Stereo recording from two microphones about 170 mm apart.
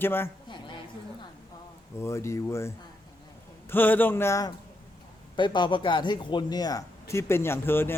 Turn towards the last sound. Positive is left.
turn(degrees=15)  # may be behind; listen again after turning